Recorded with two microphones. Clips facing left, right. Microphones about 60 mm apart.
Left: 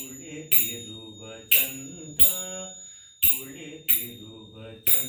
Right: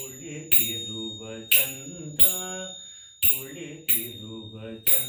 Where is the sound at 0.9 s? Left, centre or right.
Right.